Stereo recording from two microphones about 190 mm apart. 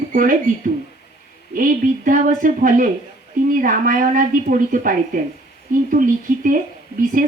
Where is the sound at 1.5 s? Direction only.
45° right (ahead or behind).